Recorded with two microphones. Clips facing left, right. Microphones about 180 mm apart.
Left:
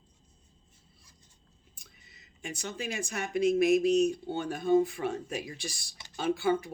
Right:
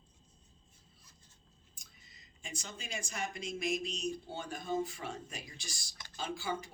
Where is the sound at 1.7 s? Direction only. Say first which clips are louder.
Left 5 dB; 60° left (ahead or behind).